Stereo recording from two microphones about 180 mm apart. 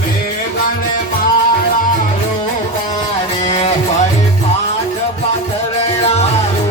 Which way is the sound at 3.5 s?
40° left (ahead or behind).